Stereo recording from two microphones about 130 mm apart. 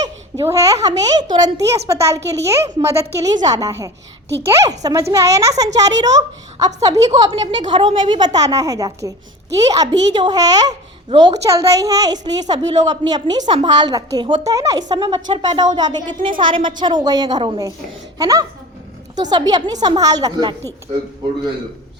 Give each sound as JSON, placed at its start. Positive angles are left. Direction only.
{"t": 0.4, "sound": "a woman's voice", "side_deg": -25}